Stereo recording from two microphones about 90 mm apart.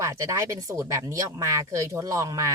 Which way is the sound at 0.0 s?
40° right (ahead or behind).